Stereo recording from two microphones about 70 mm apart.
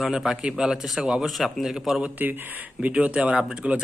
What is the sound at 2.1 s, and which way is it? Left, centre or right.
Speech, right.